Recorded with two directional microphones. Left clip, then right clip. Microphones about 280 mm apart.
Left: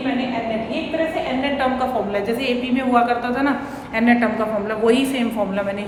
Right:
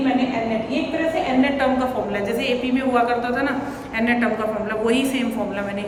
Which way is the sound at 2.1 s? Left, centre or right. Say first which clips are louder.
Left 1 dB; centre.